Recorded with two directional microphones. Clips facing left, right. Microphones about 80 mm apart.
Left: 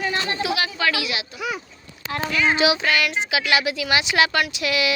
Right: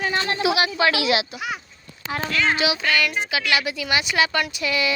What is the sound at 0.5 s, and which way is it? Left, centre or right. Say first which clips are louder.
Speech: right 3 dB; centre.